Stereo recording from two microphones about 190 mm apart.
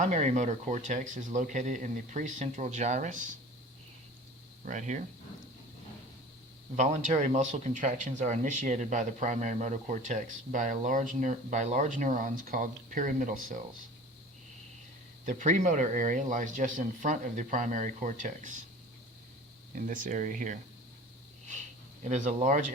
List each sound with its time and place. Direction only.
0.0 s speech: 40° right (ahead or behind)
4.6 s speech: 40° right (ahead or behind)
6.7 s speech: 40° right (ahead or behind)
15.3 s speech: 40° right (ahead or behind)
19.7 s speech: 45° right (ahead or behind)
22.0 s speech: 40° right (ahead or behind)